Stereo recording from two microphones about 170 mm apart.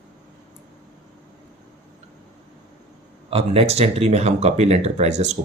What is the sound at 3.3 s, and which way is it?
Speech, 35° right (ahead or behind).